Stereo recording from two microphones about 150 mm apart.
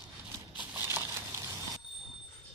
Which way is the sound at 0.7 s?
15° right (ahead or behind).